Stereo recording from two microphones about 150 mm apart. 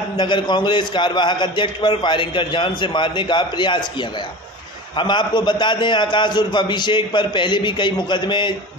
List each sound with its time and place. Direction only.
0.2 s a man's voice: 30° left (ahead or behind)
4.9 s a man's voice: 30° left (ahead or behind)